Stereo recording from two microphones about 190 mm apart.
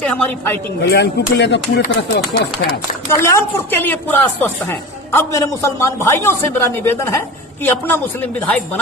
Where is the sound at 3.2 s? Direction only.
15° left (ahead or behind).